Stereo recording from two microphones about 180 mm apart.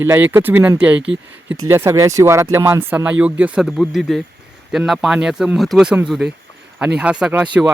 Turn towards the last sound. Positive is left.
turn(degrees=-5)  # may be behind; listen again after turning